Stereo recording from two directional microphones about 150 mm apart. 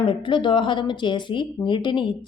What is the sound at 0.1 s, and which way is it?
Speech, 35° left (ahead or behind).